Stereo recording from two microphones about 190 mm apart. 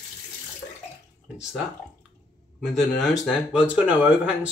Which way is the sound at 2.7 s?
Centre (ahead or behind).